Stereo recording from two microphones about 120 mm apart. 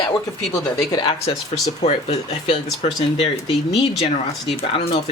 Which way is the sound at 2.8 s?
50° left (ahead or behind).